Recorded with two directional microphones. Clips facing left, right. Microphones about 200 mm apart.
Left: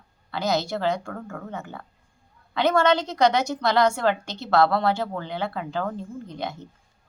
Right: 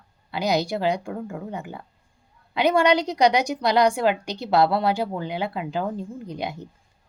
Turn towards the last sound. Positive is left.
turn(degrees=-15)  # may be behind; listen again after turning